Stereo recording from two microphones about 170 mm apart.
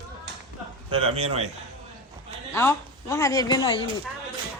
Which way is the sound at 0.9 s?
35° right (ahead or behind).